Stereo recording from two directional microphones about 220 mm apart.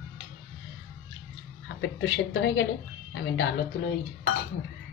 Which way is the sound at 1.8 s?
55° left (ahead or behind).